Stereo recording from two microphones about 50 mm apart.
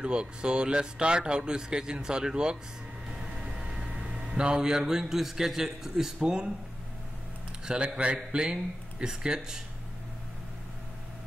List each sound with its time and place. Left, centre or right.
0.0 s a man's voice: centre
7.6 s speech: centre